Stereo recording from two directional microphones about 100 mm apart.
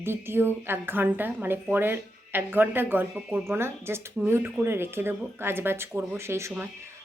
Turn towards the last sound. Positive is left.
turn(degrees=-25)  # may be behind; listen again after turning